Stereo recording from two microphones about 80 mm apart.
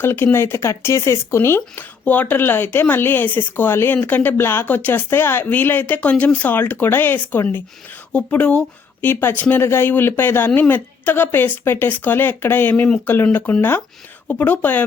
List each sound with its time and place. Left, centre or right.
0.0 s speech: left
8.1 s speech: centre
9.0 s speech: left